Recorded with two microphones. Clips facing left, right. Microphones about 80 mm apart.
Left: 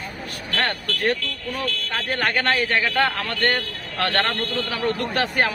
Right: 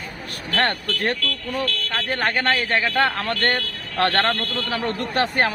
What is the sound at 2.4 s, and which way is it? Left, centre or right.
A man's voice, right.